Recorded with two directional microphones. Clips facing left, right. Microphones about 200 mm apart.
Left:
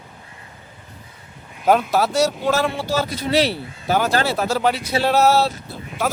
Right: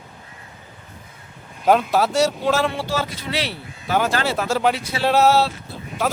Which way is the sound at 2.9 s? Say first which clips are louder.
Left 4 dB; 40° left (ahead or behind).